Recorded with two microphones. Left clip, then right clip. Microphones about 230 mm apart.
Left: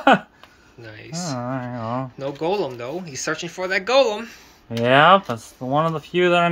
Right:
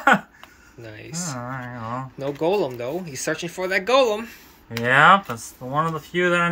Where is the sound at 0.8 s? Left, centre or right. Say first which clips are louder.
Left 1 dB; centre.